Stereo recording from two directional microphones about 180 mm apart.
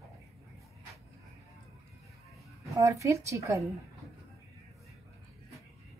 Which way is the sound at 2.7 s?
15° right (ahead or behind).